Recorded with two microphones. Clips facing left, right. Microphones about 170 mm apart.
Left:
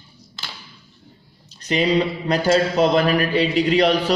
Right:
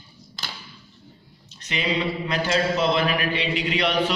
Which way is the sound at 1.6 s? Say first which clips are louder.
Left 7 dB; 40° left (ahead or behind).